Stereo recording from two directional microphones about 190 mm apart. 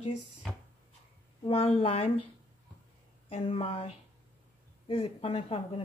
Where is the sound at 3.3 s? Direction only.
30° left (ahead or behind).